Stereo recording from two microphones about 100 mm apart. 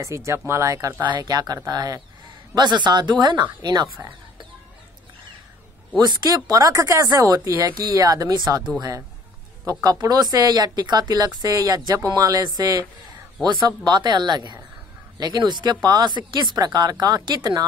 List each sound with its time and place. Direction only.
0.0 s speech: 30° right (ahead or behind)
1.0 s speech: 45° right (ahead or behind)
5.9 s speech: 45° right (ahead or behind)
9.8 s speech: 40° right (ahead or behind)